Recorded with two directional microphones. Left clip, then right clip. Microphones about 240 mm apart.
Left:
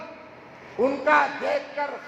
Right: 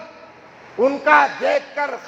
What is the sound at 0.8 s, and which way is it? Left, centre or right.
A man's voice, right.